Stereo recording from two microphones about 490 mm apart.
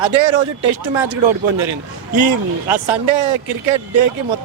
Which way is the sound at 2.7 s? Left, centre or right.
Right.